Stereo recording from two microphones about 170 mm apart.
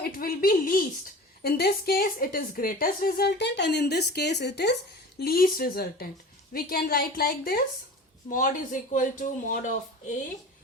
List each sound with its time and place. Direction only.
0.0 s a woman's voice: 60° left (ahead or behind); by 4.7 s 80° left
5.2 s a woman's voice: 60° left (ahead or behind)